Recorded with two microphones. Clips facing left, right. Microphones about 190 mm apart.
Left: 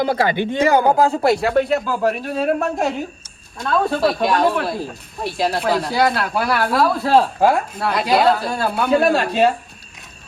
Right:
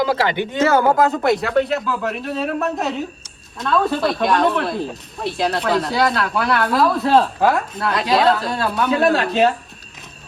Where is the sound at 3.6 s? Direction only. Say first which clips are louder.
Even; centre (ahead or behind).